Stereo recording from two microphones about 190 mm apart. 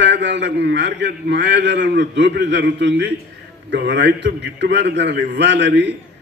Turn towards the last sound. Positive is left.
turn(degrees=-65)  # may be behind; listen again after turning